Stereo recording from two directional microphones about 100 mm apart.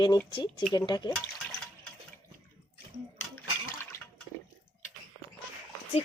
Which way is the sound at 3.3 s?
20° left (ahead or behind).